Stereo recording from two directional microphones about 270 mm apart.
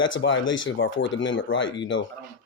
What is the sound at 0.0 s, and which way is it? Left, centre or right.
Speech, left.